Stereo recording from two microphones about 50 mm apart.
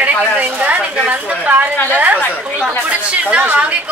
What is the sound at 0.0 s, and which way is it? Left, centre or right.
A woman's voice, right.